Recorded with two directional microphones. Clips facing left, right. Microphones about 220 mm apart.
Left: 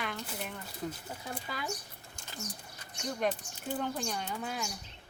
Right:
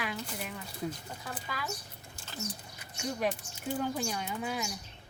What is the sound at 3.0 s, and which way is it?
Speech, 5° right (ahead or behind).